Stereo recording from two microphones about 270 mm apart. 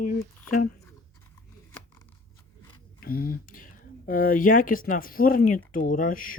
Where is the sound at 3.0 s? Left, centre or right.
Left.